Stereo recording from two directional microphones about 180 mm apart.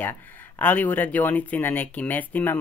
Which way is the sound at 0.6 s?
10° left (ahead or behind).